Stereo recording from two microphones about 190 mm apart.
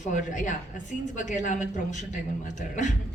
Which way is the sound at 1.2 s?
40° left (ahead or behind).